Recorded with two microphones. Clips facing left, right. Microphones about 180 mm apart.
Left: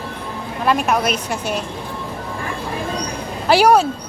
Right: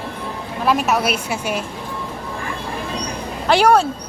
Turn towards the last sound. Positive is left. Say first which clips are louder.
# left 1 dB
turn(degrees=5)  # may be behind; listen again after turning